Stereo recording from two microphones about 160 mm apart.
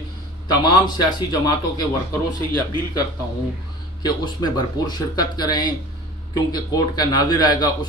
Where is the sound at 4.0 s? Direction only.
25° left (ahead or behind).